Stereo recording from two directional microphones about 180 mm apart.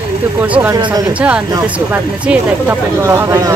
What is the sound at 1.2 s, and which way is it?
Speech, 5° right (ahead or behind).